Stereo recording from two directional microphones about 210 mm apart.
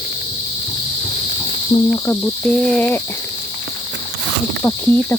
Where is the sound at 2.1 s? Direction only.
10° left (ahead or behind).